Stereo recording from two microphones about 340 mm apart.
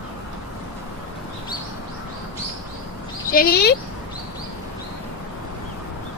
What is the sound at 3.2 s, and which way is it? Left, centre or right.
Speech, left.